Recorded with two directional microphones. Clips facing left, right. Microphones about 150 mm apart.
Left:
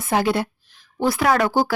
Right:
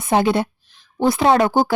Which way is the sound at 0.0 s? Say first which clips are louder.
Right 3 dB; 20° right (ahead or behind).